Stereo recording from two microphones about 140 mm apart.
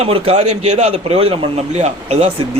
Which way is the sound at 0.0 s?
45° right (ahead or behind).